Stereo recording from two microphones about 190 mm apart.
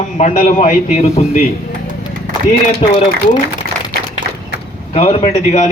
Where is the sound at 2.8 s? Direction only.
30° left (ahead or behind).